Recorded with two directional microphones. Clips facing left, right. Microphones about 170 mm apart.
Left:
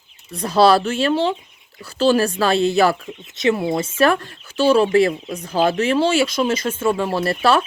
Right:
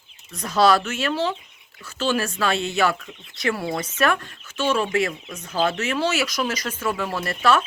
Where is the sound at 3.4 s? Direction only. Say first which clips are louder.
Left 6 dB; 20° left (ahead or behind).